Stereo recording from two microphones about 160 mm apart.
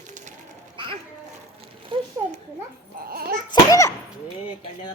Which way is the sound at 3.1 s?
70° right (ahead or behind).